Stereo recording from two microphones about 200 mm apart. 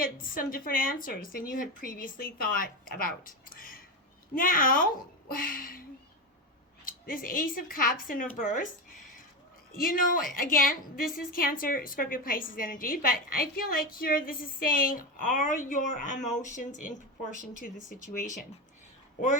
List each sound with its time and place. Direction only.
0.0 s a woman's voice: 45° left (ahead or behind)
3.5 s a sound: 45° left (ahead or behind)
4.4 s a woman's voice: 45° left (ahead or behind)
6.8 s a woman's voice: 45° left (ahead or behind)
9.7 s a woman's voice: 45° left (ahead or behind)
18.0 s speech: 40° left (ahead or behind)